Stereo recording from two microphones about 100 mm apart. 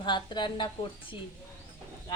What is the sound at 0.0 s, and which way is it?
Speech, 50° left (ahead or behind).